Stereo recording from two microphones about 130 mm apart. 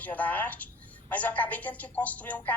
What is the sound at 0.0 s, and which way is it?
A woman's voice, 10° left (ahead or behind).